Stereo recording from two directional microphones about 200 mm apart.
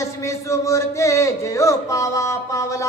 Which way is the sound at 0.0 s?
15° left (ahead or behind).